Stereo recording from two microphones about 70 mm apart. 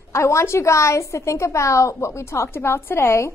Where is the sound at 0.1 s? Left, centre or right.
Left.